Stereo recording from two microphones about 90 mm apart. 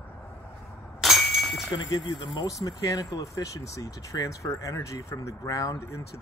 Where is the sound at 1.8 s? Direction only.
55° left (ahead or behind).